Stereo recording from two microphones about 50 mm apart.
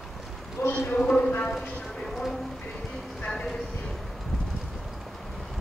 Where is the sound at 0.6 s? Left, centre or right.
Left.